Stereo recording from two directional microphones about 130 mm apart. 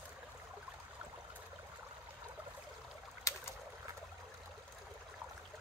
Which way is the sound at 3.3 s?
25° left (ahead or behind).